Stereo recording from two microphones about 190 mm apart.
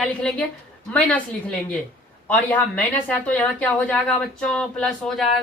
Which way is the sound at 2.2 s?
10° left (ahead or behind).